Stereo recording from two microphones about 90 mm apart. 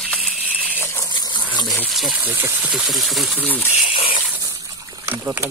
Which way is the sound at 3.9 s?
70° left (ahead or behind).